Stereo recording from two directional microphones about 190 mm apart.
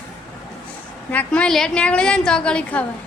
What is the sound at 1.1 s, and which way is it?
A woman's voice, 5° left (ahead or behind).